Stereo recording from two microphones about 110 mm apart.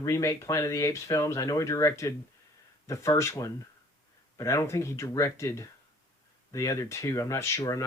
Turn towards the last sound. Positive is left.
turn(degrees=30)  # may be behind; listen again after turning